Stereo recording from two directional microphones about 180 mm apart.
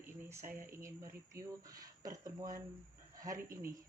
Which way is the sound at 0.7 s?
15° right (ahead or behind).